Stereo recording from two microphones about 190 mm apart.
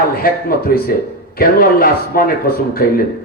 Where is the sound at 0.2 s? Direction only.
50° left (ahead or behind).